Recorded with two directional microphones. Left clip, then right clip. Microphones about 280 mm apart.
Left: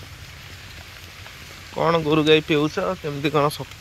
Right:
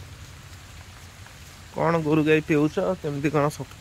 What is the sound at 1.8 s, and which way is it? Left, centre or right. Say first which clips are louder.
Speech: left 3 dB; centre.